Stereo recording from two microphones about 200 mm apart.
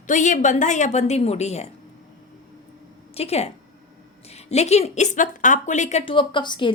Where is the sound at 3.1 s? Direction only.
30° left (ahead or behind).